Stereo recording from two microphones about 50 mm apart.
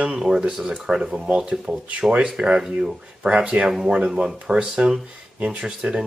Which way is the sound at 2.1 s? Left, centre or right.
Right.